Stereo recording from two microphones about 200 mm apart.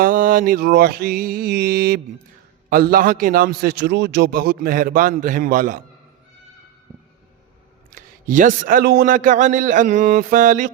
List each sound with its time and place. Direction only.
0.0 s a man's voice: 40° right (ahead or behind)
7.9 s a man's voice: 40° right (ahead or behind)